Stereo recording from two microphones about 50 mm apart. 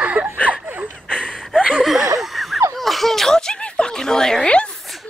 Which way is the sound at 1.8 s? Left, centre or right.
Centre.